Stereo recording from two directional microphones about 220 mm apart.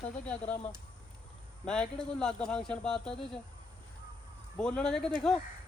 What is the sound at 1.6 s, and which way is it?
Speech, 5° left (ahead or behind).